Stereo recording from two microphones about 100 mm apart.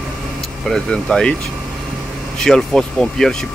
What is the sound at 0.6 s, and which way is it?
Speech, 5° left (ahead or behind).